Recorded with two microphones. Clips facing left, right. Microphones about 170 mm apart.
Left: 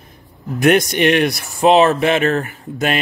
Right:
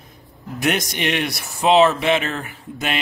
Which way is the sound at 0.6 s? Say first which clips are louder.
Left 9 dB; 55° left (ahead or behind).